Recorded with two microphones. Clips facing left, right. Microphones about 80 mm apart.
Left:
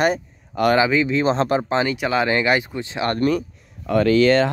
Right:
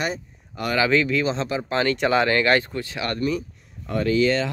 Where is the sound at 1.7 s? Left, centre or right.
Centre.